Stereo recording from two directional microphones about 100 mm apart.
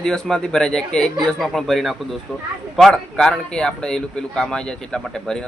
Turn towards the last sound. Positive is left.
turn(degrees=5)  # may be behind; listen again after turning